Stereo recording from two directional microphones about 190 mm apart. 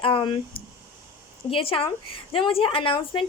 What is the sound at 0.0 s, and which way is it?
Speech, 25° left (ahead or behind).